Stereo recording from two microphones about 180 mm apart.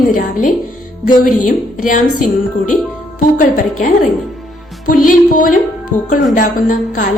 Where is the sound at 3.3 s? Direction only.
45° left (ahead or behind).